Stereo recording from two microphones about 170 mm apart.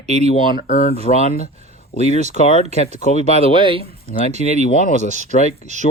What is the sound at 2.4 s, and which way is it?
Speech, 40° left (ahead or behind).